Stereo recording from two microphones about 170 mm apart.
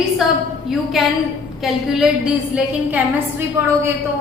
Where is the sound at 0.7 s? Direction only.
Centre (ahead or behind).